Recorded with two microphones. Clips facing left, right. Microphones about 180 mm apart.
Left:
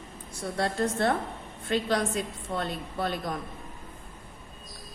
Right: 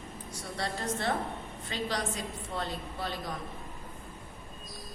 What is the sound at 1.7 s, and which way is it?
A woman's voice, 55° left (ahead or behind).